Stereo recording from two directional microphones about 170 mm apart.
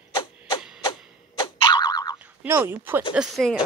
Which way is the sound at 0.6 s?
5° right (ahead or behind).